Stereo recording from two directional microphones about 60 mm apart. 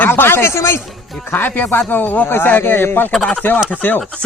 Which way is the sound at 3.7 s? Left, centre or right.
Left.